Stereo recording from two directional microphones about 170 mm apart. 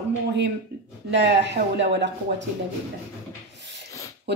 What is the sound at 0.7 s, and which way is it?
Speech, 75° right (ahead or behind).